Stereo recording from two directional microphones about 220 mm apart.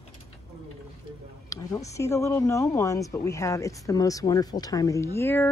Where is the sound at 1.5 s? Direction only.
15° left (ahead or behind).